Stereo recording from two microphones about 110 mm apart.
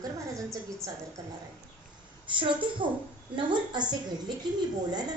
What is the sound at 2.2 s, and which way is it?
A woman's voice, 50° right (ahead or behind).